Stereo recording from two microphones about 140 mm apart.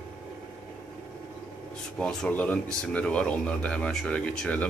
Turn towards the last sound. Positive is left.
turn(degrees=10)  # may be behind; listen again after turning